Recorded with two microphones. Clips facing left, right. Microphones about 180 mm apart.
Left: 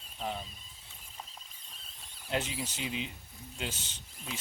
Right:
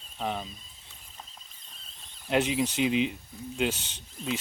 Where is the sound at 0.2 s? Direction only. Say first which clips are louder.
Right 5 dB; 90° right.